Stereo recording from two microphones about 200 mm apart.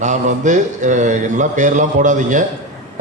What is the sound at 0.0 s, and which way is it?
A man's voice, 35° right (ahead or behind).